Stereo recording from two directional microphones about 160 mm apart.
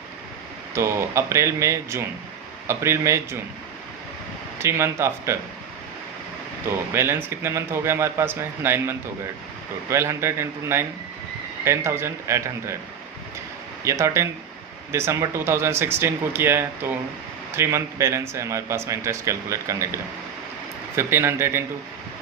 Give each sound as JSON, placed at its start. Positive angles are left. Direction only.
{"t": 0.7, "sound": "a man's voice", "side_deg": -15}
{"t": 4.6, "sound": "a man's voice", "side_deg": -15}
{"t": 6.7, "sound": "a man's voice", "side_deg": -15}
{"t": 13.8, "sound": "a man's voice", "side_deg": -20}
{"t": 20.9, "sound": "a man's voice", "side_deg": -15}